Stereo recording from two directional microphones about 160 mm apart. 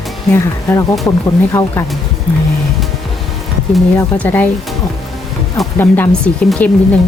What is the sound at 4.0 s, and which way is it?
Speech, 10° left (ahead or behind).